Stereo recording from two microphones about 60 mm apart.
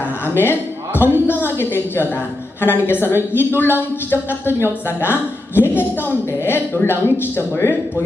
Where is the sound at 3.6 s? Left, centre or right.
Left.